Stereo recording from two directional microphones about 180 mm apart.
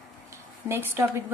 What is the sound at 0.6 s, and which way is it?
Speech, 15° right (ahead or behind).